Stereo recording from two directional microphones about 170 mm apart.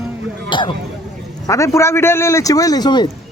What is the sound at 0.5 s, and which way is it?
Speech, 30° left (ahead or behind).